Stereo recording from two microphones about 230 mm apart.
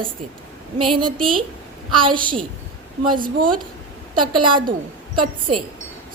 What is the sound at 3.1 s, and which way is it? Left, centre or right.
Speech, right.